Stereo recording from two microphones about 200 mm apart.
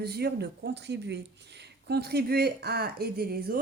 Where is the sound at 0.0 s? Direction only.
55° right (ahead or behind).